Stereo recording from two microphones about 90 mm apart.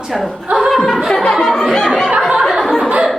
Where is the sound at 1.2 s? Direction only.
5° left (ahead or behind).